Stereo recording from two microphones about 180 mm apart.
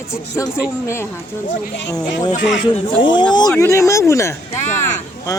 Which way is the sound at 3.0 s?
25° left (ahead or behind).